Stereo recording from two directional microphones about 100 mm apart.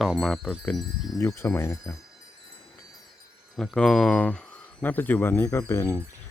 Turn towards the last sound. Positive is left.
turn(degrees=20)  # may be behind; listen again after turning